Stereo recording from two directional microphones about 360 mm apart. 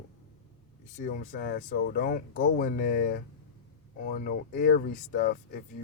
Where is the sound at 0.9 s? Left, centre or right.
Left.